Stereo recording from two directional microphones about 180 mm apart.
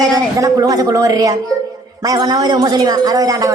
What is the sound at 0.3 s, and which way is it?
A woman's voice, 20° right (ahead or behind).